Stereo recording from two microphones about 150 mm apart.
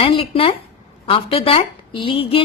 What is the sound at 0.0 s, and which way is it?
Speech, 40° left (ahead or behind).